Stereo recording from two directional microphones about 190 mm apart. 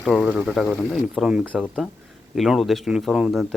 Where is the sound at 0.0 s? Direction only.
Centre (ahead or behind).